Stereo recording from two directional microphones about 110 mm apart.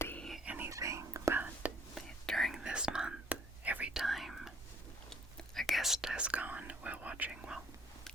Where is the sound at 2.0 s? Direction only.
Centre (ahead or behind).